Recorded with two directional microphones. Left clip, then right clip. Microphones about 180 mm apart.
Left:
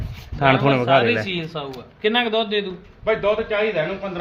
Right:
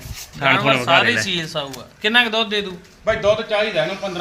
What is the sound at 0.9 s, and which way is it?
A man's voice, 5° right (ahead or behind).